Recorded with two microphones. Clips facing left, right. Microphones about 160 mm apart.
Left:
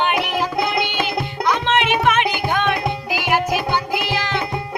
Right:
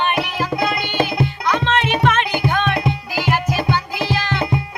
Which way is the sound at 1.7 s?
15° left (ahead or behind).